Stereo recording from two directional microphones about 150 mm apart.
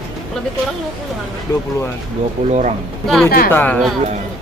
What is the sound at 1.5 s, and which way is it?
Speech, 20° left (ahead or behind).